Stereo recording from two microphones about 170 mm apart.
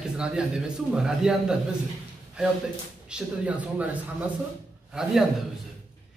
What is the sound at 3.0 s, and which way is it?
Speech, 5° right (ahead or behind).